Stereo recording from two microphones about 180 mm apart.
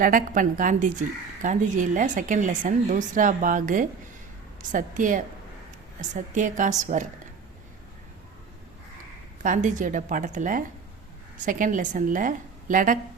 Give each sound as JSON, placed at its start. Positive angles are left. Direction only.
{"t": 0.0, "sound": "a woman's voice", "side_deg": -50}
{"t": 9.4, "sound": "a woman's voice", "side_deg": -45}